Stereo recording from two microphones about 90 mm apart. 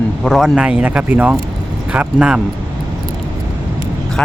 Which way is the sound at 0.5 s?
10° right (ahead or behind).